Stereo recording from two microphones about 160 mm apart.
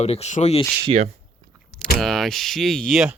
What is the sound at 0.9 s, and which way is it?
Speech, 35° right (ahead or behind).